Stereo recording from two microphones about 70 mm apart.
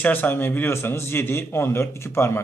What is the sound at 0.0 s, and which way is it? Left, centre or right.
A man's voice, left.